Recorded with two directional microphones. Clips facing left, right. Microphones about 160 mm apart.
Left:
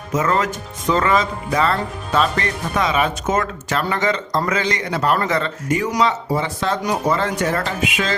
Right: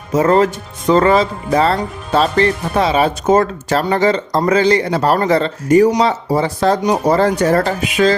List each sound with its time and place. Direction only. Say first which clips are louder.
0.1 s speech: right 7 dB; 35° right (ahead or behind)